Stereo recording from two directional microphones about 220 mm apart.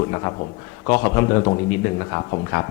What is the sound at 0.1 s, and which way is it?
A man's voice, 25° left (ahead or behind).